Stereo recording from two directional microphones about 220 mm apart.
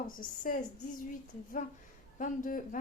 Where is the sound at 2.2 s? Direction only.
40° left (ahead or behind).